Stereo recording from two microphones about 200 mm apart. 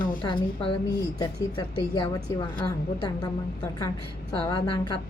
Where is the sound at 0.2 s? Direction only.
25° left (ahead or behind).